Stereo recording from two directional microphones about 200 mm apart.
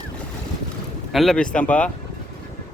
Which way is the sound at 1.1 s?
Centre (ahead or behind).